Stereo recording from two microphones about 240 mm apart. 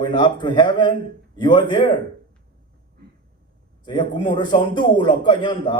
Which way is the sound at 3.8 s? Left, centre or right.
Centre.